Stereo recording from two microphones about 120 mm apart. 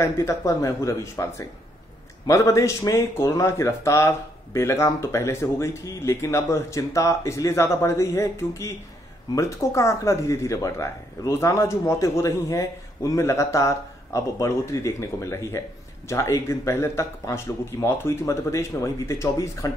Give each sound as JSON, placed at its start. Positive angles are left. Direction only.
{"t": 0.0, "sound": "a man's voice", "side_deg": 25}